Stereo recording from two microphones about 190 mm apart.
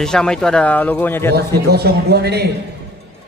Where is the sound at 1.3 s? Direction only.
55° right (ahead or behind).